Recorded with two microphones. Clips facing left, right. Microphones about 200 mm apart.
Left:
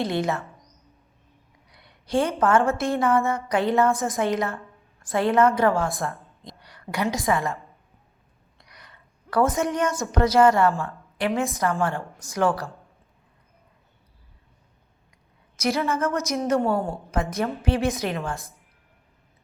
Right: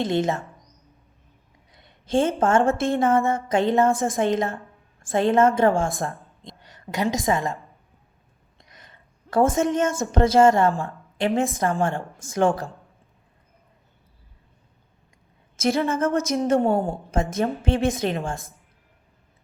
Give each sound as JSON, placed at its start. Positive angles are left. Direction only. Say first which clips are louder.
{"t": 0.1, "sound": "a woman's voice", "louder": "right 2 dB", "side_deg": -20}
{"t": 1.7, "sound": "a sound", "louder": "right 2 dB", "side_deg": -30}
{"t": 2.4, "sound": "a woman's voice", "louder": "right 1 dB", "side_deg": -20}
{"t": 8.5, "sound": "a sound", "louder": "right 1 dB", "side_deg": -20}
{"t": 10.1, "sound": "a woman's voice", "louder": "right 2 dB", "side_deg": -25}
{"t": 15.5, "sound": "a woman's voice", "louder": "right 2 dB", "side_deg": -25}